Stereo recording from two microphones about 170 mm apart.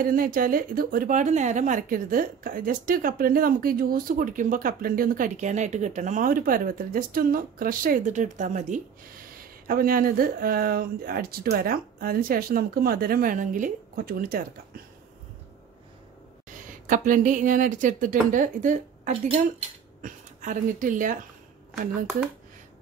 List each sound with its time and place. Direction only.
0.0 s a woman's voice: 55° right (ahead or behind)
9.7 s a woman's voice: 55° right (ahead or behind)
16.4 s a woman's voice: 50° right (ahead or behind)